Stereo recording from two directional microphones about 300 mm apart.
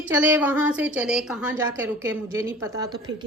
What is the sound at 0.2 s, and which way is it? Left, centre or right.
A woman's voice, centre.